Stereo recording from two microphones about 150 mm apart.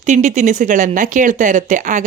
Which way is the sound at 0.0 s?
55° right (ahead or behind).